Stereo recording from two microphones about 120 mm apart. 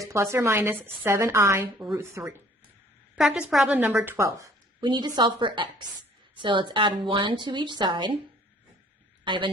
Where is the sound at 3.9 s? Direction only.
20° right (ahead or behind).